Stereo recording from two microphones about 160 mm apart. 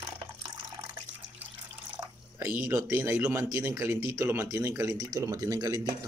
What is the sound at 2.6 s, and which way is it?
Speech, 15° right (ahead or behind).